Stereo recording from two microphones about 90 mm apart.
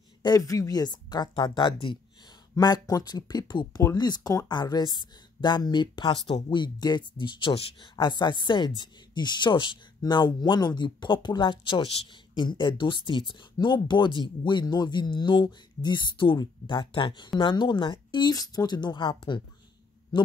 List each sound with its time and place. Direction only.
0.2 s speech: 45° left (ahead or behind); by 2.0 s 65° left (ahead or behind)
2.5 s speech: 45° left (ahead or behind); by 17.9 s 60° left (ahead or behind)
17.9 s speech: 50° left (ahead or behind)